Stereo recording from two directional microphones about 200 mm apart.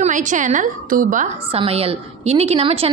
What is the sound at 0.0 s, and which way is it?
A woman's voice, 40° right (ahead or behind).